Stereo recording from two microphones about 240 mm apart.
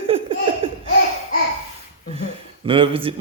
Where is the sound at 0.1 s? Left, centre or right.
Right.